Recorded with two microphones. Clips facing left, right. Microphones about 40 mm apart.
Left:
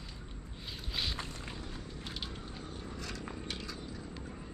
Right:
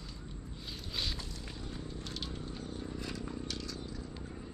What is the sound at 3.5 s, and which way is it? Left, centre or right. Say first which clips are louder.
Cat: even; centre.